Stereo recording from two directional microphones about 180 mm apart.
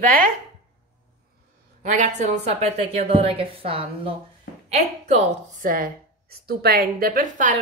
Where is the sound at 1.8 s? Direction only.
40° right (ahead or behind).